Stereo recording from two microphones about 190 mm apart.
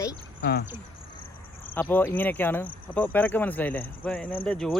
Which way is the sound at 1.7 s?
10° left (ahead or behind).